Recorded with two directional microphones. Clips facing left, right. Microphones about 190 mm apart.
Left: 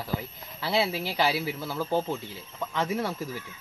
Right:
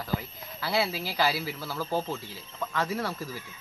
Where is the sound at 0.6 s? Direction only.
20° left (ahead or behind).